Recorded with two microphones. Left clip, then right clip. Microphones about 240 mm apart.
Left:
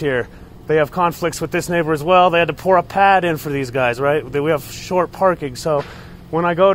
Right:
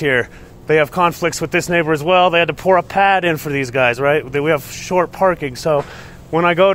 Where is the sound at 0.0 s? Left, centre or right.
Centre.